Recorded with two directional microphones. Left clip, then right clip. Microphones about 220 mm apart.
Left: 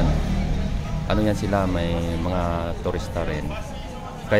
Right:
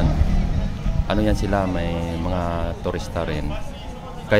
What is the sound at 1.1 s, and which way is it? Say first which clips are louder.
Speech: right 1 dB; 10° right (ahead or behind).